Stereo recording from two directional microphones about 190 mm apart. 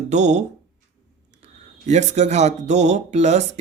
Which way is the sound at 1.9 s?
40° right (ahead or behind).